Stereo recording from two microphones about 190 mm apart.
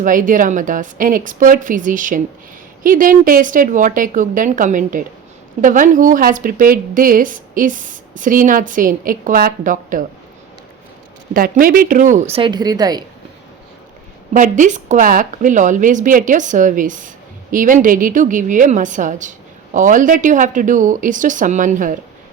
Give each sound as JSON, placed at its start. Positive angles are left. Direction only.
{"t": 0.0, "sound": "a woman's voice", "side_deg": -45}
{"t": 11.3, "sound": "speech", "side_deg": -50}
{"t": 14.3, "sound": "a woman's voice", "side_deg": -40}